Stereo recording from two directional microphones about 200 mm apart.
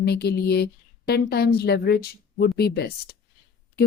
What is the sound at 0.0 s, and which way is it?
Speech, 55° left (ahead or behind).